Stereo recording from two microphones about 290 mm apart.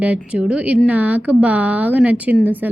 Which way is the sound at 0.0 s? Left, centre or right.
Centre.